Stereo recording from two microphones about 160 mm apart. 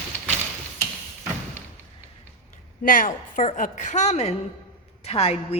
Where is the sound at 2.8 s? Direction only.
60° left (ahead or behind).